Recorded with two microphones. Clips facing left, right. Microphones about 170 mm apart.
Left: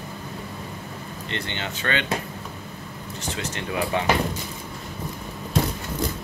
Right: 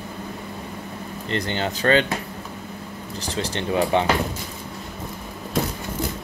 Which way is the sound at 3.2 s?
35° right (ahead or behind).